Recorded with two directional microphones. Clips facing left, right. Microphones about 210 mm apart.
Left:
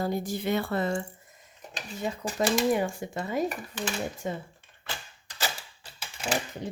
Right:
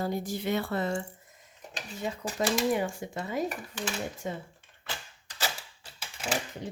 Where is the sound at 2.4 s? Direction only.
45° left (ahead or behind).